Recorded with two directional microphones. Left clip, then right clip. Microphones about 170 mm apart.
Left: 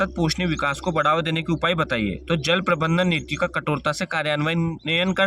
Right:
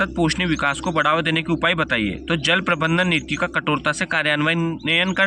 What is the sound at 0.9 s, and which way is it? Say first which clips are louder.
Speech: right 1 dB; 40° left (ahead or behind).